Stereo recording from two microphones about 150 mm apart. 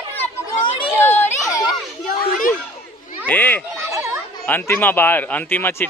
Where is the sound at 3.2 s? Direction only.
10° left (ahead or behind).